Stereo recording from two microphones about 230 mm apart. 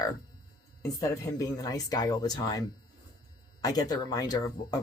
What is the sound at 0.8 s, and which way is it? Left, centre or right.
Speech, centre.